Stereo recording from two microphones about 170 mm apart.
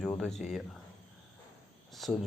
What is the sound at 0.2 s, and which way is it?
Speech, 5° left (ahead or behind).